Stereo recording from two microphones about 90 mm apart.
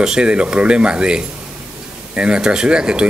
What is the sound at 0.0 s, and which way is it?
Speech, 10° right (ahead or behind).